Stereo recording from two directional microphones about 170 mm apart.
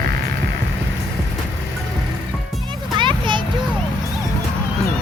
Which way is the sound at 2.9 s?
30° right (ahead or behind).